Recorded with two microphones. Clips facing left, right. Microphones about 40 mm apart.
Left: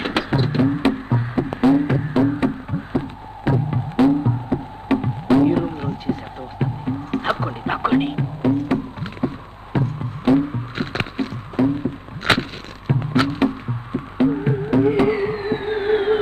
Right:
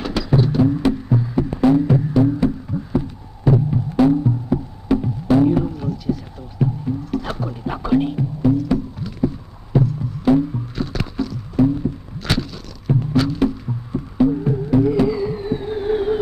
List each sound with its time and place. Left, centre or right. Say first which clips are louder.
0.0 s music: right 1 dB; left